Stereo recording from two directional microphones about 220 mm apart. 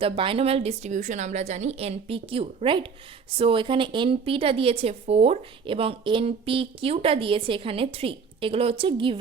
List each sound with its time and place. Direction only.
0.0 s a woman's voice: 25° right (ahead or behind)